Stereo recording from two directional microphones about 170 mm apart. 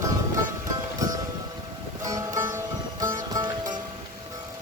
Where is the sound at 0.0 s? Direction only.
20° right (ahead or behind).